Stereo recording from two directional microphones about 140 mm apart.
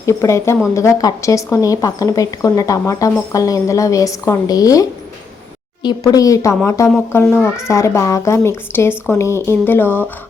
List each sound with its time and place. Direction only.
0.0 s a woman's voice: 20° left (ahead or behind)